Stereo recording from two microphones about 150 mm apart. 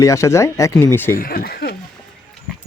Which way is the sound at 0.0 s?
20° left (ahead or behind).